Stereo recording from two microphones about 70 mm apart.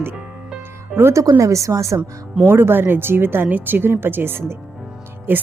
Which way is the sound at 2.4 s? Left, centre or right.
Right.